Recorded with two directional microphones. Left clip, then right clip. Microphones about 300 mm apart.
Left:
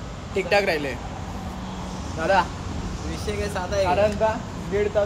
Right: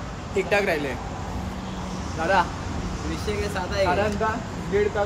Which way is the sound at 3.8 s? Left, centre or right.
Centre.